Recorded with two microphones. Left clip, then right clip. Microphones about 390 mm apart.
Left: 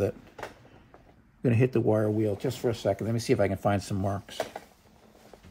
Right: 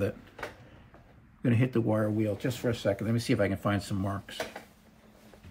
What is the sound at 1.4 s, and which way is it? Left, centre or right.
Speech, centre.